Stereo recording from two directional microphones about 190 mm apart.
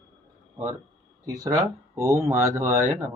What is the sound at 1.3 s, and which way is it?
Speech, 15° right (ahead or behind).